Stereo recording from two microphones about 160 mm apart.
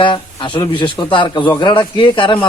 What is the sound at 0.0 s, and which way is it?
Speech, 30° left (ahead or behind).